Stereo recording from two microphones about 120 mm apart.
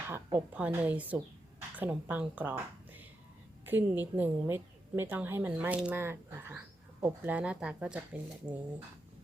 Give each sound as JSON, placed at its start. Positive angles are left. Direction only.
{"t": 0.3, "sound": "a woman's voice", "side_deg": -15}